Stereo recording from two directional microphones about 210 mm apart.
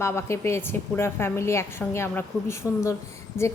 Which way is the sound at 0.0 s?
10° left (ahead or behind).